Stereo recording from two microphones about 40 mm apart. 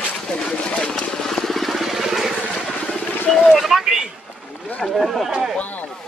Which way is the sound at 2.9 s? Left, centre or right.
Centre.